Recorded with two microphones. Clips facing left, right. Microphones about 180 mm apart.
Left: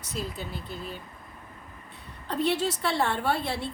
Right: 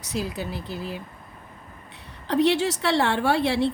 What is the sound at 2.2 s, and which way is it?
A woman's voice, 75° right (ahead or behind).